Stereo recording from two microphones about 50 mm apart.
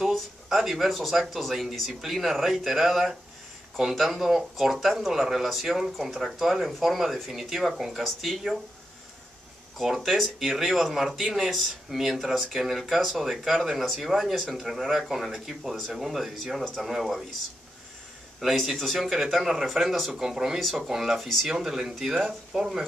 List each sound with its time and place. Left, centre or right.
0.0 s speech: centre
9.8 s speech: centre
18.4 s speech: centre
21.5 s speech: centre